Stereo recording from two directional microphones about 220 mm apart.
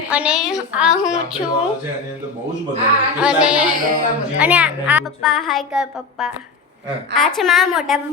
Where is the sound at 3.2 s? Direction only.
5° right (ahead or behind).